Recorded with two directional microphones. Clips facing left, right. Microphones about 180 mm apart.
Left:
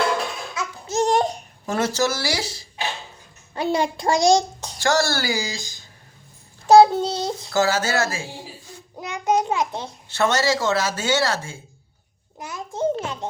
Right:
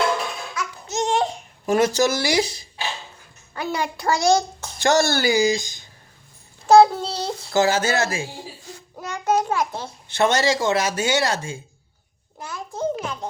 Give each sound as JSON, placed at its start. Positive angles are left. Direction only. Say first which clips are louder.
{"t": 0.5, "sound": "babbling", "louder": "left 5 dB", "side_deg": 35}
{"t": 1.6, "sound": "speech", "louder": "right 4 dB", "side_deg": -15}
{"t": 3.5, "sound": "a child's voice", "louder": "left 4 dB", "side_deg": 25}
{"t": 4.3, "sound": "a sound", "louder": "left 1 dB", "side_deg": 15}
{"t": 4.8, "sound": "speech", "louder": "right 2 dB", "side_deg": -20}
{"t": 6.7, "sound": "child singing", "louder": "left 1 dB", "side_deg": 15}
{"t": 7.5, "sound": "speech", "louder": "right 2 dB", "side_deg": -20}
{"t": 9.0, "sound": "a sound", "louder": "even", "side_deg": 15}
{"t": 9.4, "sound": "a child's voice", "louder": "even", "side_deg": 20}
{"t": 10.1, "sound": "speech", "louder": "right 1 dB", "side_deg": -15}
{"t": 12.4, "sound": "a sound", "louder": "left 2 dB", "side_deg": 20}